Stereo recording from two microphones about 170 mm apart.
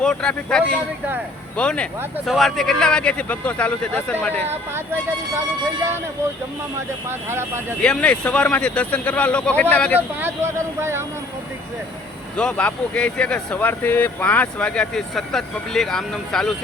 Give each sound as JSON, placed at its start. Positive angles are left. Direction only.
{"t": 0.0, "sound": "speech", "side_deg": 5}
{"t": 7.1, "sound": "speech", "side_deg": -15}
{"t": 7.8, "sound": "speech", "side_deg": 5}
{"t": 10.2, "sound": "speech", "side_deg": -15}
{"t": 12.4, "sound": "speech", "side_deg": 5}